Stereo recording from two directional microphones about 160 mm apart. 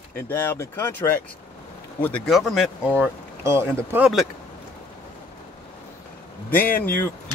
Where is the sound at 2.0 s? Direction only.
5° left (ahead or behind).